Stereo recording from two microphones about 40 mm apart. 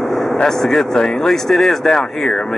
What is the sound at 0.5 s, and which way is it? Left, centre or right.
Speech, centre.